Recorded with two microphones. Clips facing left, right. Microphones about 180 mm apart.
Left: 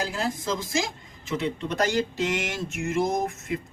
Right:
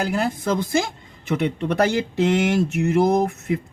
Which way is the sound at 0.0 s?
60° right (ahead or behind).